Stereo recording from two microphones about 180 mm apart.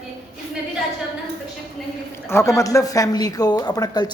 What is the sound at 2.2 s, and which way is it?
Speech, 15° left (ahead or behind).